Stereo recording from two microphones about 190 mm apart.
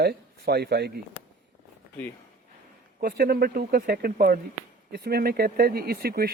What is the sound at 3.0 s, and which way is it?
Speech, 55° right (ahead or behind).